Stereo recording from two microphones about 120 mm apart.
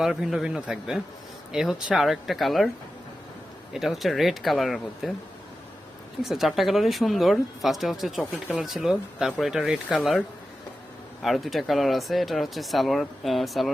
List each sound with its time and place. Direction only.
0.0 s speech: 5° right (ahead or behind)
3.7 s speech: centre (ahead or behind)
6.2 s speech: centre (ahead or behind)
11.2 s speech: centre (ahead or behind)